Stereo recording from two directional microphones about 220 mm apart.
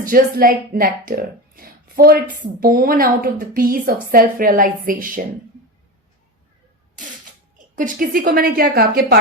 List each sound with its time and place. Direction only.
0.0 s speech: 40° right (ahead or behind)
7.8 s speech: 40° right (ahead or behind)